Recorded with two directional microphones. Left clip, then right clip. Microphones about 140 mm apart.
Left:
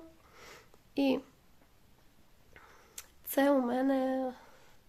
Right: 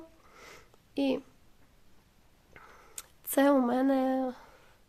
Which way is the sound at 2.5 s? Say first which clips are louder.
Right 4 dB; 30° right (ahead or behind).